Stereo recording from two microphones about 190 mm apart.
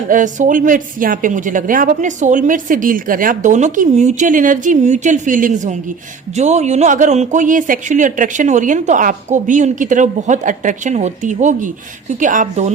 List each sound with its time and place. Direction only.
0.1 s a woman's voice: 40° right (ahead or behind)